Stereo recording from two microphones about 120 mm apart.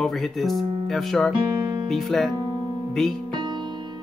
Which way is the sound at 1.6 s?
30° right (ahead or behind).